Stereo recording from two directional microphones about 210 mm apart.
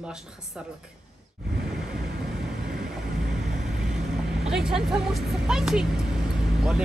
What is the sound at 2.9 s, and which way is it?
Vehicle, centre (ahead or behind).